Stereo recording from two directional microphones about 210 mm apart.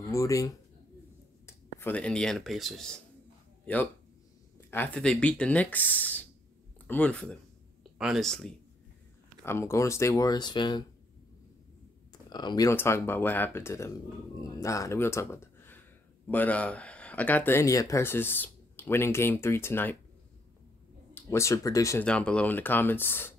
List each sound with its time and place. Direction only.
0.1 s speech: 15° left (ahead or behind)
4.6 s speech: 10° left (ahead or behind)
12.1 s speech: 20° left (ahead or behind)
21.1 s speech: 15° left (ahead or behind)